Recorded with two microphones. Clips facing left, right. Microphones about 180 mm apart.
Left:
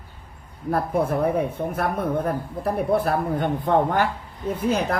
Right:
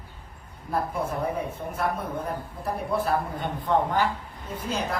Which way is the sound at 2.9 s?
55° left (ahead or behind).